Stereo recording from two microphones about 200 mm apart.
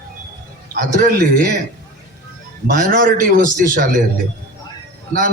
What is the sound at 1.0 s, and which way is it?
Speech, 50° right (ahead or behind).